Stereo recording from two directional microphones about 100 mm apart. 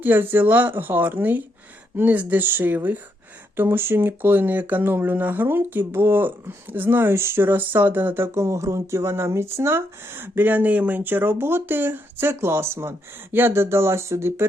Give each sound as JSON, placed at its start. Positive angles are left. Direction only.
{"t": 0.0, "sound": "speech", "side_deg": -20}